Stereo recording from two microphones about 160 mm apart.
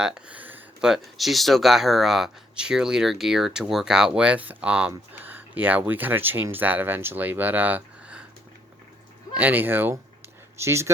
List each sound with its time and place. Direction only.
0.0 s speech: 5° right (ahead or behind)
9.3 s speech: 10° right (ahead or behind)